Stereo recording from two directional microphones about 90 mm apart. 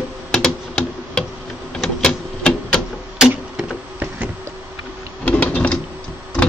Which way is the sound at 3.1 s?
5° right (ahead or behind).